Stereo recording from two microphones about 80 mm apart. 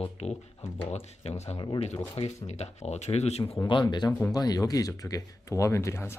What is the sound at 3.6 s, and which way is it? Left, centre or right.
Speech, left.